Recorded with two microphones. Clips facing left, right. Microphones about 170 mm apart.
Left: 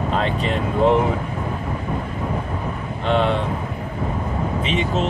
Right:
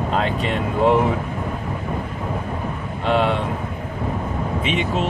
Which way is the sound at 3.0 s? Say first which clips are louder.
Even; 5° right (ahead or behind).